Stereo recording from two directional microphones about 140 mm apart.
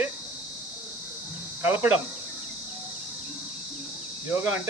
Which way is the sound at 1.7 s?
15° right (ahead or behind).